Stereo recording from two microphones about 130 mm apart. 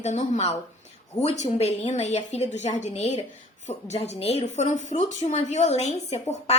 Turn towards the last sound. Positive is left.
turn(degrees=60)  # may be behind; listen again after turning